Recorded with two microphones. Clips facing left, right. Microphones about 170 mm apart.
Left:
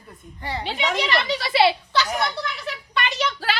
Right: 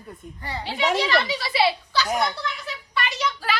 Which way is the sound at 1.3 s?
65° left (ahead or behind).